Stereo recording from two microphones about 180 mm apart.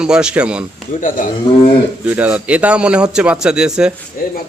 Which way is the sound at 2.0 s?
10° right (ahead or behind).